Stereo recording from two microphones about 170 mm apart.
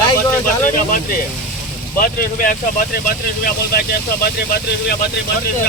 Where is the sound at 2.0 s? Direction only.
50° left (ahead or behind).